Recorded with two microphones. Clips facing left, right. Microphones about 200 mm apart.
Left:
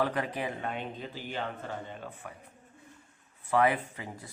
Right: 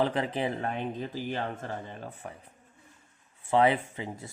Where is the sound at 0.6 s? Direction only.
40° right (ahead or behind).